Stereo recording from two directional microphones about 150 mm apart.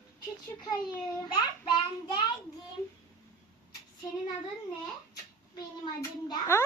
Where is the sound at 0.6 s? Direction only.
25° left (ahead or behind).